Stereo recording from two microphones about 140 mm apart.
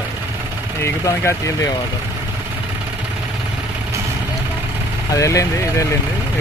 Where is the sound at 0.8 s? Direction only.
20° left (ahead or behind).